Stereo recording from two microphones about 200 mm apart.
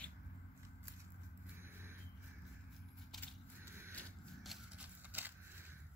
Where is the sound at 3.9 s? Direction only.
Centre (ahead or behind).